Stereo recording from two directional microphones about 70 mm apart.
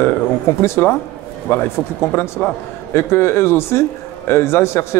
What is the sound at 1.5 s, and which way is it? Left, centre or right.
A man's voice, left.